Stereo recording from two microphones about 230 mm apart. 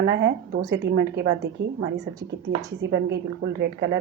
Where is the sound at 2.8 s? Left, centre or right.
Right.